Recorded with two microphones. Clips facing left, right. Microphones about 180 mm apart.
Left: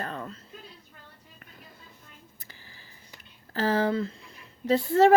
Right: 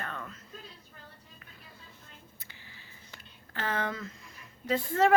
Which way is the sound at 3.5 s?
35° left (ahead or behind).